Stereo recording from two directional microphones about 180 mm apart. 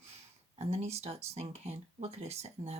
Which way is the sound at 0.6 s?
35° right (ahead or behind).